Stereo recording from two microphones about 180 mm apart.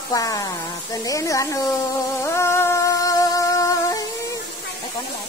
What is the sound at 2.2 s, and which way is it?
Music, 15° left (ahead or behind).